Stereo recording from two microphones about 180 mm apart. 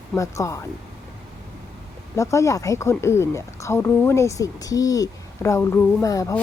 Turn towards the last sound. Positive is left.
turn(degrees=20)  # may be behind; listen again after turning